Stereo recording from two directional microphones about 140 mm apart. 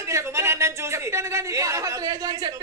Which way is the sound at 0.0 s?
20° right (ahead or behind).